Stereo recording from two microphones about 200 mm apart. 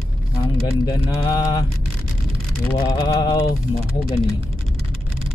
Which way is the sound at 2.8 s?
20° left (ahead or behind).